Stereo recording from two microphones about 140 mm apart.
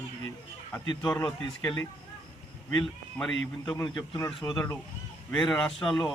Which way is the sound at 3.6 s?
30° left (ahead or behind).